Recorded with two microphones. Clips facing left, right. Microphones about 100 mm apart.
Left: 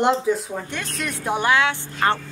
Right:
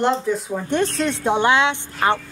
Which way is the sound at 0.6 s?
30° right (ahead or behind).